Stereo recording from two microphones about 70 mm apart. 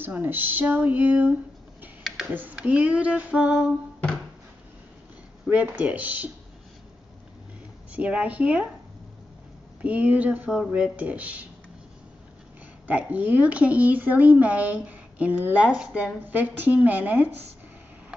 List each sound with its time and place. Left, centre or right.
0.0 s speech: right
2.3 s speech: right
5.5 s speech: centre
7.9 s speech: centre
9.8 s speech: centre
12.8 s speech: right
16.3 s speech: right